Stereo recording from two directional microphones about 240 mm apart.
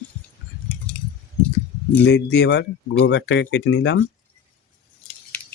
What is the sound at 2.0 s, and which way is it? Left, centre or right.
Speech, left.